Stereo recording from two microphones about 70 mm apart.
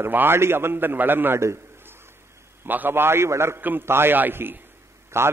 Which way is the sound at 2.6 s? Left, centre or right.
Right.